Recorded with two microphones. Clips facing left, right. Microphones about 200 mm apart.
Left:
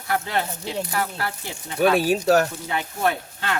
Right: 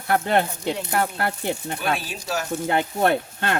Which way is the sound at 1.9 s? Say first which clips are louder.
Left 9 dB; 60° left (ahead or behind).